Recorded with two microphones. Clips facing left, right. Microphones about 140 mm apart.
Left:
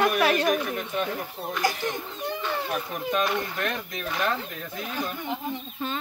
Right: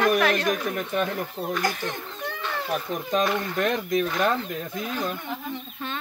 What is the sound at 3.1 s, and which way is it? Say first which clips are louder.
Speech: right 2 dB; 35° right (ahead or behind).